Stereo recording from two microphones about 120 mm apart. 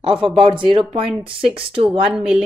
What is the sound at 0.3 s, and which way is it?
Speech, 45° right (ahead or behind).